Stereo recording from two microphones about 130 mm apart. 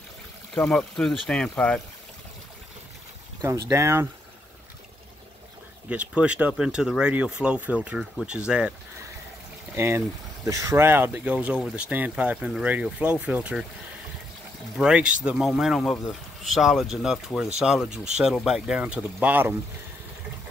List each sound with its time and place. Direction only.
0.6 s speech: 5° left (ahead or behind)
3.4 s speech: 20° right (ahead or behind)
5.9 s speech: 10° right (ahead or behind)
9.8 s speech: 20° right (ahead or behind)
14.8 s speech: 5° right (ahead or behind)